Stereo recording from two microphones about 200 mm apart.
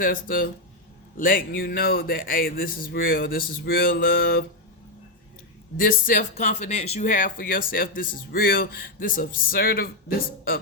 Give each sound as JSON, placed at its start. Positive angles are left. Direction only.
{"t": 0.0, "sound": "a man's voice", "side_deg": 45}
{"t": 5.7, "sound": "speech", "side_deg": 45}